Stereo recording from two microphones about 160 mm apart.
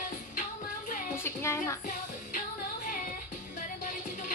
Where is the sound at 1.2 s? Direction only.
15° left (ahead or behind).